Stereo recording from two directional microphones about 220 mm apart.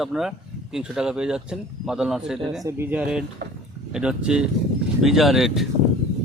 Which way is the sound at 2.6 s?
10° right (ahead or behind).